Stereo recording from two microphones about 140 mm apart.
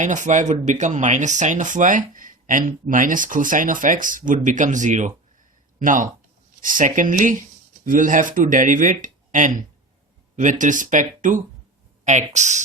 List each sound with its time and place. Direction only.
0.0 s speech: 60° right (ahead or behind)
5.8 s speech: 70° right (ahead or behind)
12.0 s speech: 55° right (ahead or behind)